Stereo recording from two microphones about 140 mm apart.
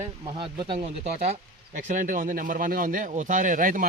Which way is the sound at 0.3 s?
35° right (ahead or behind).